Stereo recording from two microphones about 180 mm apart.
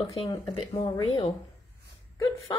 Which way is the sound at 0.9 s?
25° left (ahead or behind).